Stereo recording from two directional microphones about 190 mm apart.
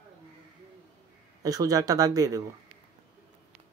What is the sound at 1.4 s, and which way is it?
Speech, 20° right (ahead or behind).